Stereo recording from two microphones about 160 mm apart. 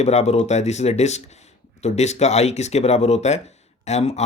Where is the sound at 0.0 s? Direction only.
45° left (ahead or behind).